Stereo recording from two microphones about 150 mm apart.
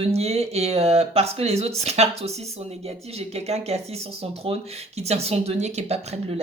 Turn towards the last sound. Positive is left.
turn(degrees=-45)  # may be behind; listen again after turning